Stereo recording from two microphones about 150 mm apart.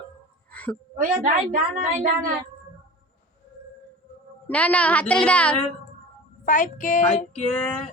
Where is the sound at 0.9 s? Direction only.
65° right (ahead or behind).